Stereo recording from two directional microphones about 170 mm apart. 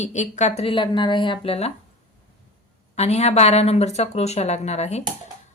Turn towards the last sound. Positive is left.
turn(degrees=40)  # may be behind; listen again after turning